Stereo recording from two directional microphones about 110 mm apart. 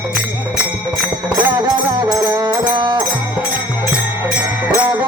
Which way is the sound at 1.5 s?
40° right (ahead or behind).